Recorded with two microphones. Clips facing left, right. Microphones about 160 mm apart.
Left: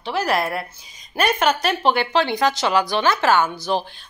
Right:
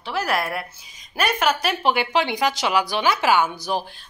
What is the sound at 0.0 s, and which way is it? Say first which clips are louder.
Speech: left 3 dB; centre (ahead or behind).